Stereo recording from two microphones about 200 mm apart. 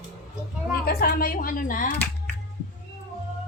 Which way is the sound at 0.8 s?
50° left (ahead or behind).